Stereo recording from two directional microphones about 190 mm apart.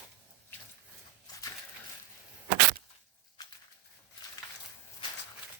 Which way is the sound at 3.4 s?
20° left (ahead or behind).